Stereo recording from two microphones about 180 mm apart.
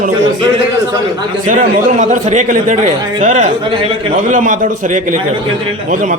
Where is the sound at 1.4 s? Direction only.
45° right (ahead or behind).